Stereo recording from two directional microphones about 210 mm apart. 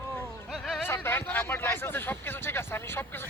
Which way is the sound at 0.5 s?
Centre (ahead or behind).